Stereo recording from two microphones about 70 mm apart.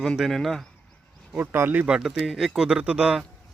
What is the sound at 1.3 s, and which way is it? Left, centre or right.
Speech, right.